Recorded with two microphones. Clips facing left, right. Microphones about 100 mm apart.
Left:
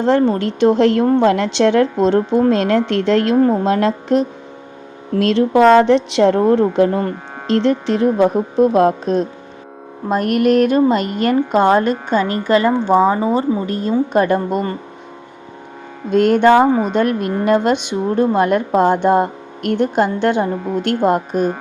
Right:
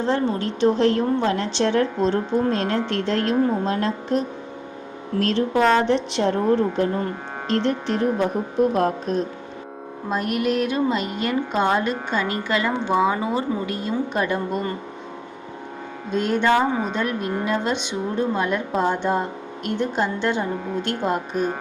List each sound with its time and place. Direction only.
0.0 s a woman's voice: 65° left (ahead or behind); by 9.2 s 90° left
10.1 s music: 55° left (ahead or behind)
12.5 s a woman's voice: 40° left (ahead or behind)
16.1 s a woman's voice: 60° left (ahead or behind)